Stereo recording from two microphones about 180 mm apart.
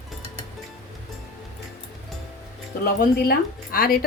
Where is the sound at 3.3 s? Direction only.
55° left (ahead or behind).